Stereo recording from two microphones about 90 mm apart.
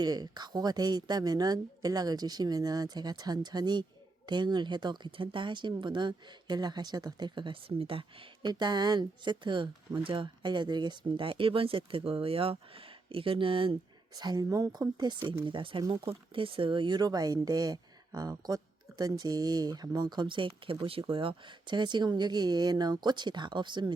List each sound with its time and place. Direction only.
0.0 s speech: 50° right (ahead or behind); by 8.3 s 90° right
8.4 s speech: 55° right (ahead or behind); by 13.7 s 85° right
14.2 s speech: 45° right (ahead or behind)
15.4 s speech: 70° right (ahead or behind)